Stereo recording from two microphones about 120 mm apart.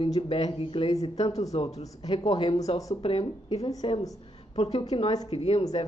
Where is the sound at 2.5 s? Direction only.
60° left (ahead or behind).